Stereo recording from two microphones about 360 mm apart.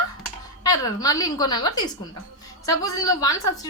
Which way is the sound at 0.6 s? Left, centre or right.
Centre.